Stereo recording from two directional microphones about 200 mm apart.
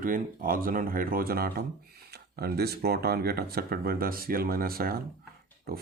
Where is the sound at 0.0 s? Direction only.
45° right (ahead or behind).